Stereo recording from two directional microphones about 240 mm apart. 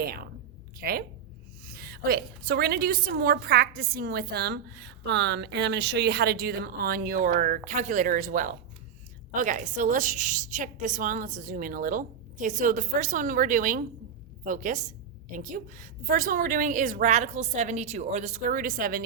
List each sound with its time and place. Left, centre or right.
0.8 s a woman's voice: right